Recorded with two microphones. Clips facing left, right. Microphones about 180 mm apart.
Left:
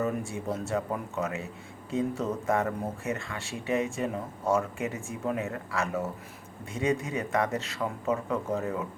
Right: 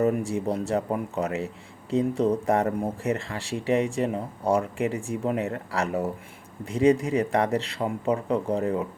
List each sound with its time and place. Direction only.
0.0 s speech: 35° right (ahead or behind)